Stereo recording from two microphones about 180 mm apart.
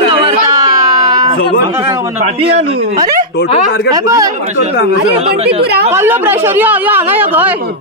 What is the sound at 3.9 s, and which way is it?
Speech, 20° right (ahead or behind).